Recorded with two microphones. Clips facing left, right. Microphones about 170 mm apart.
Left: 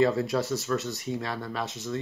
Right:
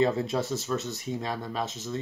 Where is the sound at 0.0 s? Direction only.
20° right (ahead or behind).